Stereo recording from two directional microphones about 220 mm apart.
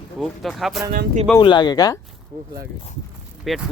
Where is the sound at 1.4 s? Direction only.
20° left (ahead or behind).